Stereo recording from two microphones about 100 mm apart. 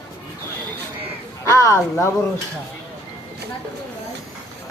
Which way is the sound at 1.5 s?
30° left (ahead or behind).